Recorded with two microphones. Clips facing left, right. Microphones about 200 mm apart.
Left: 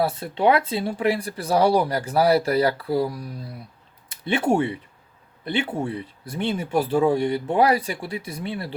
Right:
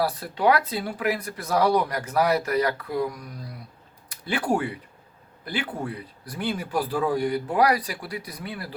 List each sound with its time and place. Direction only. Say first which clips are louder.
0.0 s a man's voice: left 2 dB; 25° left (ahead or behind)